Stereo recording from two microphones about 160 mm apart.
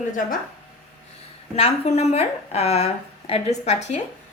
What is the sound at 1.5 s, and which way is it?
A woman's voice, 40° left (ahead or behind).